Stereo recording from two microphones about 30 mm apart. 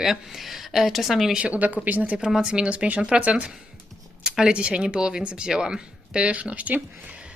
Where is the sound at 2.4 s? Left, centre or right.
Right.